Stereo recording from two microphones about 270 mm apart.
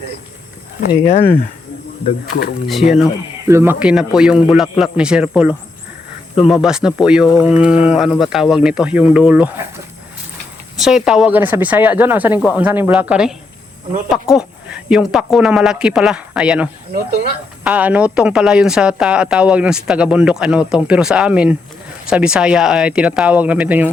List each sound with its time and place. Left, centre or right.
0.9 s speech: left
2.6 s speech: centre
10.8 s speech: centre